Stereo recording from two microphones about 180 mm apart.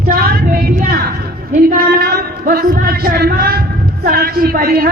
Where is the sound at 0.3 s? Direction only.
60° right (ahead or behind).